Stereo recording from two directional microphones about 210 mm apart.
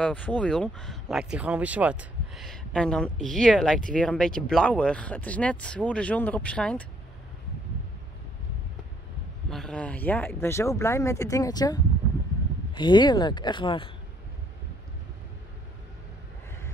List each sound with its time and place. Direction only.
0.0 s speech: 5° left (ahead or behind)
9.5 s speech: 5° left (ahead or behind); by 13.8 s 25° left (ahead or behind)